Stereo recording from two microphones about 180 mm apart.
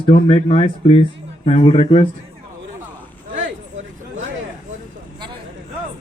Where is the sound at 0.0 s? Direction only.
35° left (ahead or behind).